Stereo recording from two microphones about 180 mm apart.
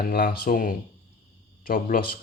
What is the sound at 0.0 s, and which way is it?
Speech, 55° left (ahead or behind).